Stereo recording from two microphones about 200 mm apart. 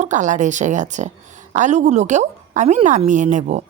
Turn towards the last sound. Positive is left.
turn(degrees=-35)  # may be behind; listen again after turning